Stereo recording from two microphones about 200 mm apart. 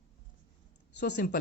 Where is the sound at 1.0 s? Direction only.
55° left (ahead or behind).